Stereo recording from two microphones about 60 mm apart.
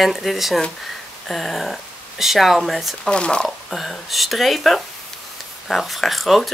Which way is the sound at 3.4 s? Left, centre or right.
Centre.